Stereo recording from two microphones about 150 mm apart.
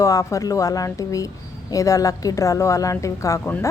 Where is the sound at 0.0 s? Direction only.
20° left (ahead or behind).